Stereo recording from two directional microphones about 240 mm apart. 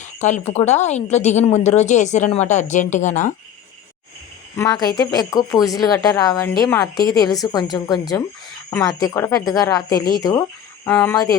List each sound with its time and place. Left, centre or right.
0.2 s speech: left
4.5 s speech: centre